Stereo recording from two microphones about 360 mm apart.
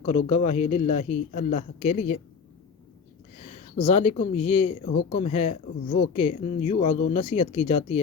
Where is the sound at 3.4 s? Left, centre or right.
Centre.